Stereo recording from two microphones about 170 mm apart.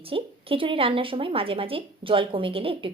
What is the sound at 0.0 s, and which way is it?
A woman's voice, 30° right (ahead or behind).